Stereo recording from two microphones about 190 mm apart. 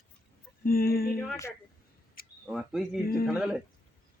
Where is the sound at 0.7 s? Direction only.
50° left (ahead or behind).